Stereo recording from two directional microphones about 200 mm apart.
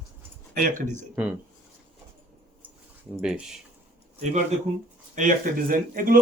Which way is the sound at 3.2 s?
5° right (ahead or behind).